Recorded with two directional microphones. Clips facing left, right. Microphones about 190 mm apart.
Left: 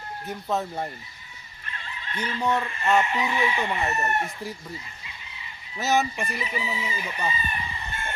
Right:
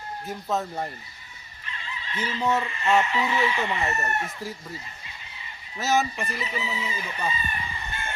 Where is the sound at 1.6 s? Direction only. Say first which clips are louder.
Right 1 dB; 50° left (ahead or behind).